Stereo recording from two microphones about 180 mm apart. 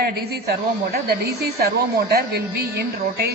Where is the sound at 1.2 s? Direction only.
60° right (ahead or behind).